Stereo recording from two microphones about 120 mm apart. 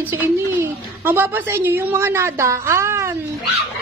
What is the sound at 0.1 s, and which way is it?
A woman's voice, 15° right (ahead or behind).